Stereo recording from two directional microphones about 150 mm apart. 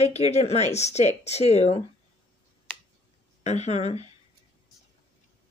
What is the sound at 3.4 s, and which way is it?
Speech, 50° left (ahead or behind).